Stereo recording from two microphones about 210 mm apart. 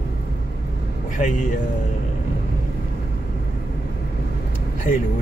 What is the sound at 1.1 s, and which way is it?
Speech, 35° left (ahead or behind).